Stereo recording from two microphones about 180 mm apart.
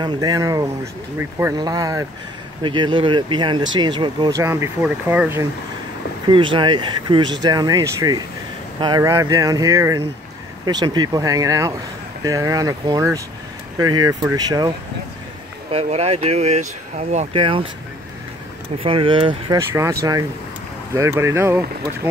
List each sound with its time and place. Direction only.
0.0 s speech: 20° right (ahead or behind)
6.2 s speech: 25° right (ahead or behind)
15.7 s speech: 35° right (ahead or behind)
18.8 s speech: 30° right (ahead or behind)
19.7 s speech: 15° right (ahead or behind)